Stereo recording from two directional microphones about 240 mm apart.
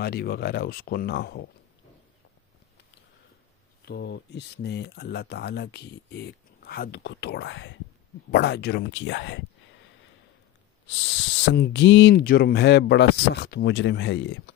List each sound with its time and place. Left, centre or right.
0.0 s speech: left
3.8 s speech: left
11.1 s speech: left